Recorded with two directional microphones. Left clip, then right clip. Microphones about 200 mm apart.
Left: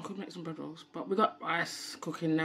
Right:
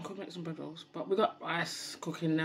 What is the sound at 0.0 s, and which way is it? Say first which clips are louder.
Speech: even; 15° left (ahead or behind).